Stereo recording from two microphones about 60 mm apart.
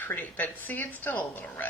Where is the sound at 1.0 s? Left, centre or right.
Left.